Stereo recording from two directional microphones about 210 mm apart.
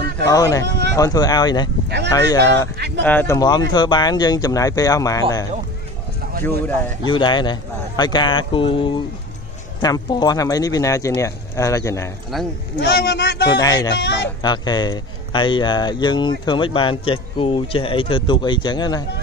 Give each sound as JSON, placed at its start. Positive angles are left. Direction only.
{"t": 0.2, "sound": "speech", "side_deg": 15}
{"t": 7.1, "sound": "a man's voice", "side_deg": 20}
{"t": 12.3, "sound": "speech", "side_deg": 0}
{"t": 12.7, "sound": "speech", "side_deg": 50}
{"t": 13.5, "sound": "a man's voice", "side_deg": 20}
{"t": 13.9, "sound": "a man's voice", "side_deg": 55}
{"t": 14.4, "sound": "a man's voice", "side_deg": 20}